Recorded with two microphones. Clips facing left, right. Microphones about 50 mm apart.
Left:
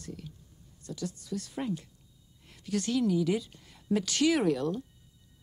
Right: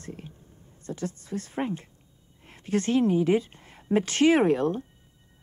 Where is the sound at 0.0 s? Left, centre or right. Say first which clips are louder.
Right 3 dB; right.